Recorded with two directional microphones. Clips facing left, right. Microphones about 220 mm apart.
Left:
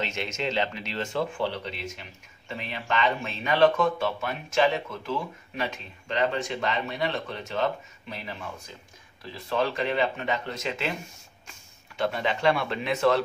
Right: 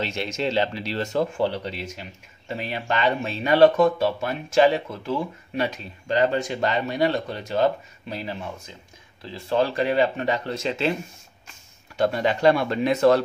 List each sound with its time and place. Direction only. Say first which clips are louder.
0.0 s speech: right 4 dB; 35° right (ahead or behind)
12.0 s speech: right 6 dB; 40° right (ahead or behind)